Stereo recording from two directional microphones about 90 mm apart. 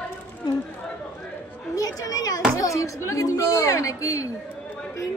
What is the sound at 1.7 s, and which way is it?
A woman's voice, 40° left (ahead or behind).